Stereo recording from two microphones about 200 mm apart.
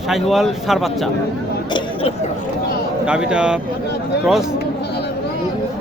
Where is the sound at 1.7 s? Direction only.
20° left (ahead or behind).